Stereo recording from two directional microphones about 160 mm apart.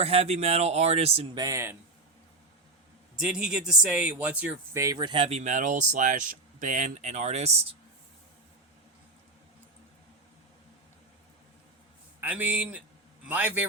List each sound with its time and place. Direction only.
0.0 s speech: 40° right (ahead or behind)
1.4 s speech: 20° right (ahead or behind)
3.2 s speech: 5° right (ahead or behind); by 5.4 s 35° right (ahead or behind)
5.4 s speech: 50° right (ahead or behind)
12.2 s speech: 10° right (ahead or behind)